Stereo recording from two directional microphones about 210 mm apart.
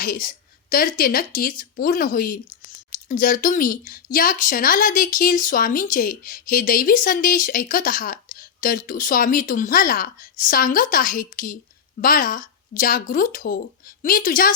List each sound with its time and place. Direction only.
0.0 s a woman's voice: 45° left (ahead or behind)